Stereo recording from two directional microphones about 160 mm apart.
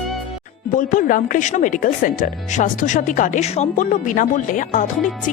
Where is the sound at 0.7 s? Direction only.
55° left (ahead or behind).